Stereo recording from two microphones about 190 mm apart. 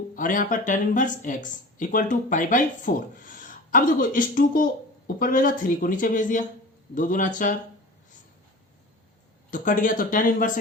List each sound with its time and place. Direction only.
0.2 s speech: 45° left (ahead or behind)
9.5 s speech: 45° left (ahead or behind)